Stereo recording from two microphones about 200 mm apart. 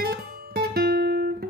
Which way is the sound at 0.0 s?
50° right (ahead or behind).